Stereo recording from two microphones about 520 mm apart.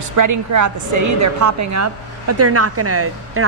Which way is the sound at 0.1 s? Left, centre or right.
Right.